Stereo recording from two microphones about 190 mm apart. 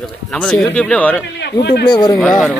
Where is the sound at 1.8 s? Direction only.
25° left (ahead or behind).